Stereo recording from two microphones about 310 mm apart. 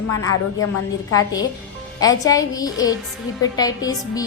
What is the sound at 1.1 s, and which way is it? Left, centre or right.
Speech, centre.